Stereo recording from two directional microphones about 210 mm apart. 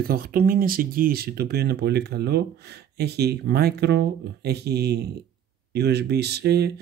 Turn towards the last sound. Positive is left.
turn(degrees=-50)  # may be behind; listen again after turning